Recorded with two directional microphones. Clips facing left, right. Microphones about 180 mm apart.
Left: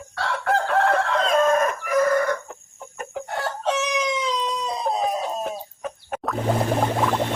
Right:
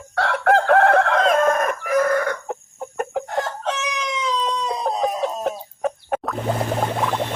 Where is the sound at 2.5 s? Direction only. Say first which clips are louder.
Right 11 dB; 70° right (ahead or behind).